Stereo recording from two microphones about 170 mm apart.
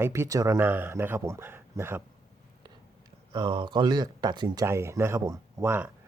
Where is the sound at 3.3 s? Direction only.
25° right (ahead or behind).